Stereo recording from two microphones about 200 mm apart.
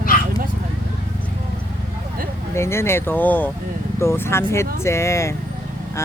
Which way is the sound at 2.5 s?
15° left (ahead or behind).